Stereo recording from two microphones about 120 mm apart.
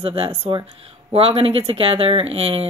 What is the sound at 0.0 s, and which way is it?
Speech, 50° right (ahead or behind).